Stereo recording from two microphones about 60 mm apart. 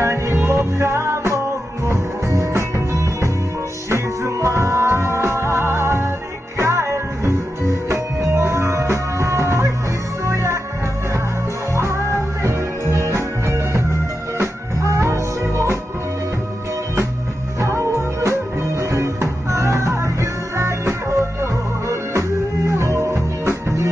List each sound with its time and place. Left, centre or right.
0.0 s music: right
12.4 s music: right
17.6 s music: right